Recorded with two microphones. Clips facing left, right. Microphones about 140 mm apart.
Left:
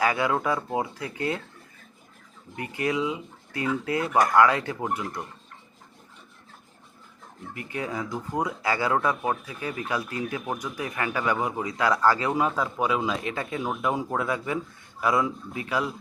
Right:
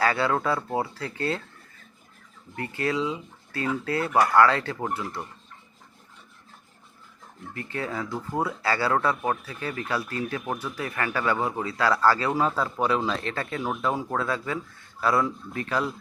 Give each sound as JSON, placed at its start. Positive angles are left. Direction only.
{"t": 0.0, "sound": "speech", "side_deg": 15}
{"t": 2.6, "sound": "speech", "side_deg": 15}
{"t": 7.5, "sound": "speech", "side_deg": 15}
{"t": 12.5, "sound": "speech", "side_deg": 5}